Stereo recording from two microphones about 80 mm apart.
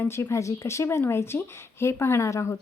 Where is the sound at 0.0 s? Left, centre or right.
Left.